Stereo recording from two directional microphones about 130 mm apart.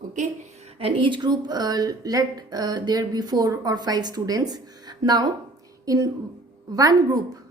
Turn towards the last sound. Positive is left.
turn(degrees=-30)  # may be behind; listen again after turning